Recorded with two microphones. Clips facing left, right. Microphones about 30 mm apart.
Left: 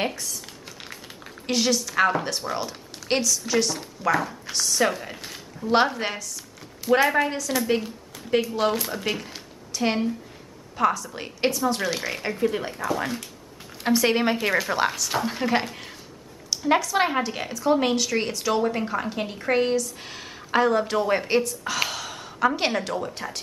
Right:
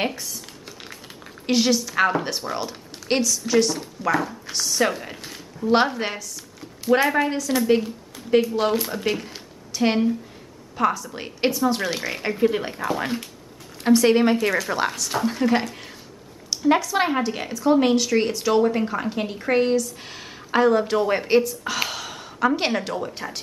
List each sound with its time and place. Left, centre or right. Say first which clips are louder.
0.0 s speech: right 1 dB; centre
1.4 s a woman's voice: right 3 dB; centre
13.8 s speech: right 4 dB; centre